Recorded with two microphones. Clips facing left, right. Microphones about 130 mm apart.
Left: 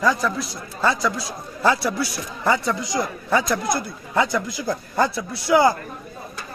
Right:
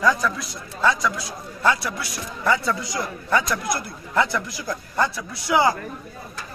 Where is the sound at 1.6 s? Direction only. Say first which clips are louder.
Left 3 dB; 35° left (ahead or behind).